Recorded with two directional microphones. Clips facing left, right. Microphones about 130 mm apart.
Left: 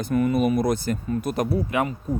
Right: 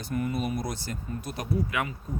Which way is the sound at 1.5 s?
35° left (ahead or behind).